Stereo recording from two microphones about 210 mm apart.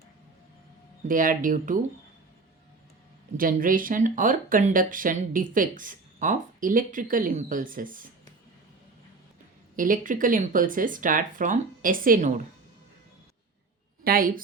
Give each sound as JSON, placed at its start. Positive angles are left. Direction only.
{"t": 1.0, "sound": "speech", "side_deg": -40}
{"t": 3.3, "sound": "speech", "side_deg": -40}
{"t": 9.7, "sound": "speech", "side_deg": -40}
{"t": 14.0, "sound": "a woman's voice", "side_deg": -45}